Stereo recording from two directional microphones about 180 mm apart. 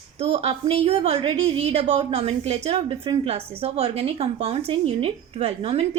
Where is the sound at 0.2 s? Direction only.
35° right (ahead or behind).